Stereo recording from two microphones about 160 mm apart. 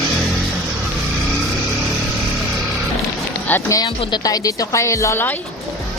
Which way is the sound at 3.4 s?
10° left (ahead or behind).